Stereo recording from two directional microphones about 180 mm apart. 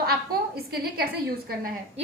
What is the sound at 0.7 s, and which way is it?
A woman's voice, 60° right (ahead or behind).